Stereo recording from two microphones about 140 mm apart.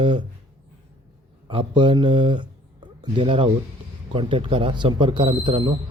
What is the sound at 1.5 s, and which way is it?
A man's voice, 40° right (ahead or behind).